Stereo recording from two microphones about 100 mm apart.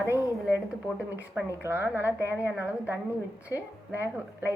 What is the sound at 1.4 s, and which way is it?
A woman's voice, 20° right (ahead or behind).